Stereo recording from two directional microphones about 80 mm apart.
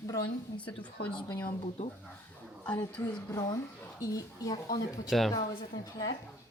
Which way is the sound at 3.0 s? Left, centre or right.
Left.